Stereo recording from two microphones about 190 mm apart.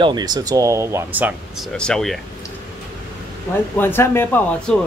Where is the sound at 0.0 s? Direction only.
20° right (ahead or behind).